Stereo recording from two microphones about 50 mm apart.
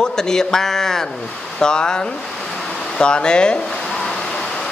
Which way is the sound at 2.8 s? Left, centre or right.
Centre.